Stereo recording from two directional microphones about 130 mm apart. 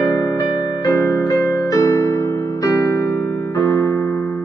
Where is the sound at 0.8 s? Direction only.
25° left (ahead or behind).